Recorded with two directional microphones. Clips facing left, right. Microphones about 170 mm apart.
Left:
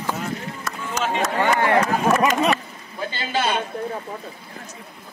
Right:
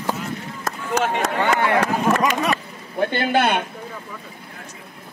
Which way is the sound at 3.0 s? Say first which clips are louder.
Right 6 dB; 60° right (ahead or behind).